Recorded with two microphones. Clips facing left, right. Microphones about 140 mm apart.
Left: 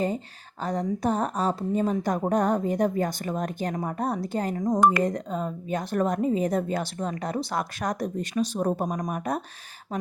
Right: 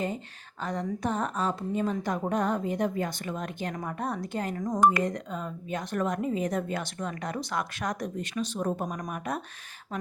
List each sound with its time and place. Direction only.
0.6 s a woman's voice: 35° left (ahead or behind)